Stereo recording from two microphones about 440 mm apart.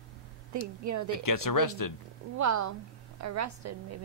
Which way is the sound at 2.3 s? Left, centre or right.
Right.